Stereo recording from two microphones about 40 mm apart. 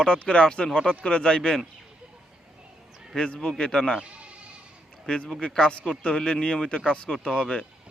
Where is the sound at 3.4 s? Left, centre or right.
Centre.